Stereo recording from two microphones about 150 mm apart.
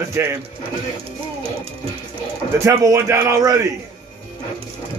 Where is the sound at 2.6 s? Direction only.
20° right (ahead or behind).